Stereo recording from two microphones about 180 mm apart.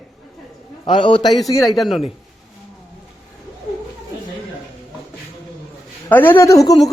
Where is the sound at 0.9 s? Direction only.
25° left (ahead or behind).